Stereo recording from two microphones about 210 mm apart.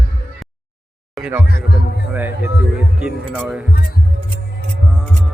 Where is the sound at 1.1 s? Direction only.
5° right (ahead or behind).